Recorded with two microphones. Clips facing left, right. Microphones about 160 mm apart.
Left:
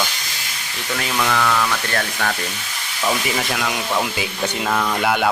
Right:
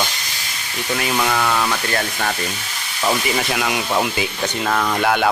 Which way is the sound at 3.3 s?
5° right (ahead or behind).